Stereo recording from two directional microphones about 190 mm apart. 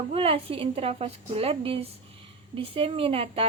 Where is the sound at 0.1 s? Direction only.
30° right (ahead or behind).